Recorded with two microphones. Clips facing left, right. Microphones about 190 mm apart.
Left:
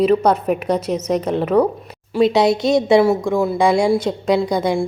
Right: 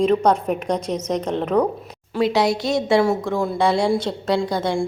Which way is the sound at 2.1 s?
20° left (ahead or behind).